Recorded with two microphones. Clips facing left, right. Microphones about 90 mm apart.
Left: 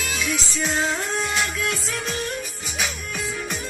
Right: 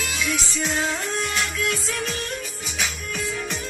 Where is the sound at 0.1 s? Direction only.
25° left (ahead or behind).